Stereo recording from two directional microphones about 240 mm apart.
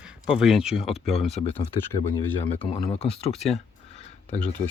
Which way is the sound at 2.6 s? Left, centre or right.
Left.